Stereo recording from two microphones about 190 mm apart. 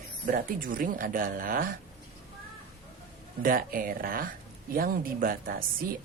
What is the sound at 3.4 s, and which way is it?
A woman's voice, 50° right (ahead or behind).